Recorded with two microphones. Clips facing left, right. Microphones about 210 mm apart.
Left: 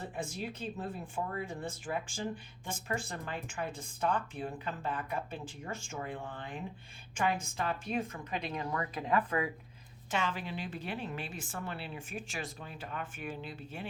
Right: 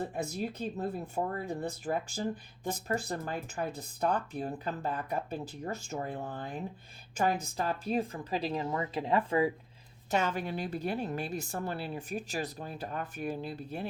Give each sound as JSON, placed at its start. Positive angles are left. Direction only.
{"t": 0.1, "sound": "speech", "side_deg": -40}
{"t": 10.1, "sound": "speech", "side_deg": -40}